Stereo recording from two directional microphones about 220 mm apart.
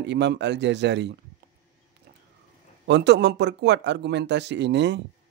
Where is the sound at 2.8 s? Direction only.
50° right (ahead or behind).